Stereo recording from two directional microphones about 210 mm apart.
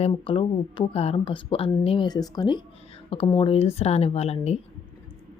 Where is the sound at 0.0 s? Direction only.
25° left (ahead or behind).